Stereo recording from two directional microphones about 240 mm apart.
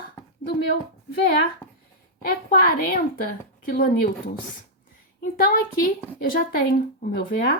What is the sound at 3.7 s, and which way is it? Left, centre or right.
Speech, left.